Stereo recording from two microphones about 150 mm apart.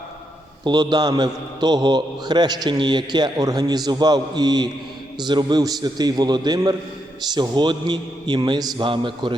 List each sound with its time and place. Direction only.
0.6 s a man's voice: 30° right (ahead or behind)